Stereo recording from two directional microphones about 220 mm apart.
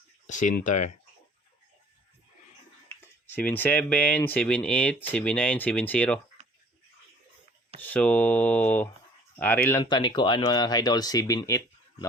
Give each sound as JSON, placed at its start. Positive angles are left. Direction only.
{"t": 0.3, "sound": "speech", "side_deg": 35}
{"t": 3.2, "sound": "speech", "side_deg": 10}
{"t": 7.8, "sound": "speech", "side_deg": 5}
{"t": 9.8, "sound": "speech", "side_deg": 20}